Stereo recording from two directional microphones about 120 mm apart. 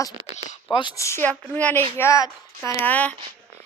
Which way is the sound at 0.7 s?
40° left (ahead or behind).